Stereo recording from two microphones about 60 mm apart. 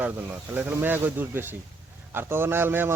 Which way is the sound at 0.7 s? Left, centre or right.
Right.